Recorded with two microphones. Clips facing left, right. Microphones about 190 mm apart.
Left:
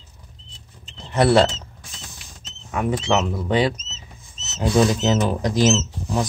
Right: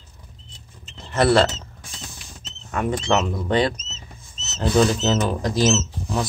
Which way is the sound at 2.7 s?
5° left (ahead or behind).